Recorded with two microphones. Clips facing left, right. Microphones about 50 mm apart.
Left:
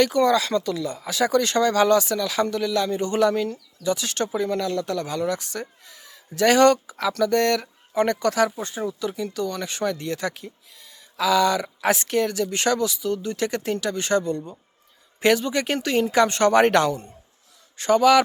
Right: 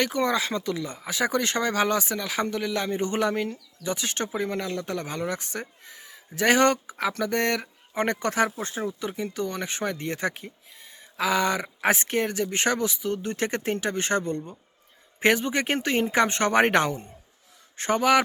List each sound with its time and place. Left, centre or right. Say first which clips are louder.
0.0 s speech: left 6 dB; right